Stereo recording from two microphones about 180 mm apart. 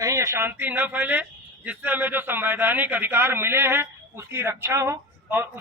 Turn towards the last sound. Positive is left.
turn(degrees=-10)  # may be behind; listen again after turning